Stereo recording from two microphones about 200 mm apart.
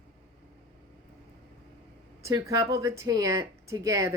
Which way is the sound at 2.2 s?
15° right (ahead or behind).